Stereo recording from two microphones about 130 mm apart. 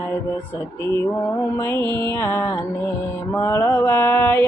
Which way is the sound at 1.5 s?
15° left (ahead or behind).